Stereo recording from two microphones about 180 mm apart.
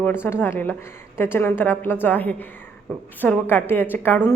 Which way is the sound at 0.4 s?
10° left (ahead or behind).